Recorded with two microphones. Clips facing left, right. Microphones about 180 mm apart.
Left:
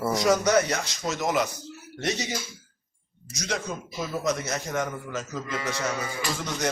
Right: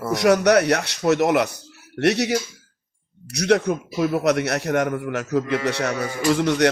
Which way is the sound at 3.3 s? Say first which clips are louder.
Right 12 dB; 65° right (ahead or behind).